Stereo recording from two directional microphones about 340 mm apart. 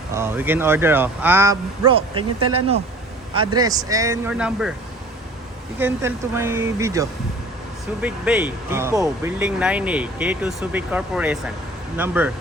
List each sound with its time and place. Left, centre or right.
0.1 s speech: centre
2.4 s speech: right
3.5 s speech: centre
5.8 s speech: centre